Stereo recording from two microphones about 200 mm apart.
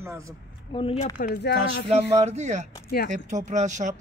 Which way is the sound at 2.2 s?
35° right (ahead or behind).